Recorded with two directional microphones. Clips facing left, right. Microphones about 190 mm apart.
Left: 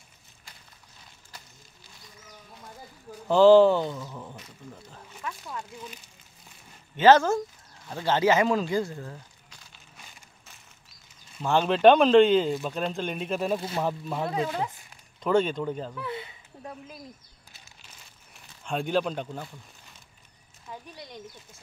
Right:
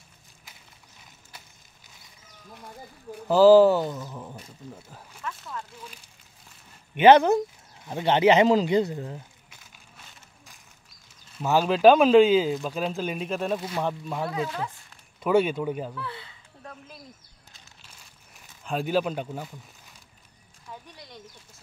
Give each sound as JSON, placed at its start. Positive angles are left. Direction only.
{"t": 3.3, "sound": "speech", "side_deg": -5}
{"t": 5.2, "sound": "speech", "side_deg": 10}
{"t": 7.0, "sound": "speech", "side_deg": -15}
{"t": 11.4, "sound": "speech", "side_deg": -5}
{"t": 14.3, "sound": "speech", "side_deg": 25}
{"t": 15.2, "sound": "speech", "side_deg": -10}
{"t": 15.9, "sound": "a sound", "side_deg": 20}
{"t": 18.3, "sound": "speech", "side_deg": -5}
{"t": 20.7, "sound": "a sound", "side_deg": 5}